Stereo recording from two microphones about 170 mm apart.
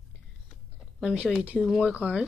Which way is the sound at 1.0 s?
5° right (ahead or behind).